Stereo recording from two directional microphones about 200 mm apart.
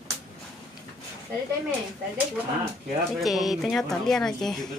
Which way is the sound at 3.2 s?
Centre (ahead or behind).